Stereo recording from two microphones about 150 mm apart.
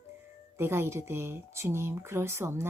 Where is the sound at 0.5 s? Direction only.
15° right (ahead or behind).